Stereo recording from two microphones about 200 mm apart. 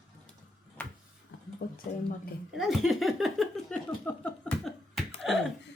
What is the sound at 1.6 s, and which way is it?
Speech, 55° left (ahead or behind).